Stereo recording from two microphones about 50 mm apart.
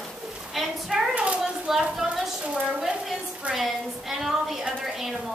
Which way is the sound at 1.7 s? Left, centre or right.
Centre.